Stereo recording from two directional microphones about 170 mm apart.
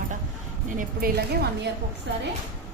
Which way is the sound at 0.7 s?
65° right (ahead or behind).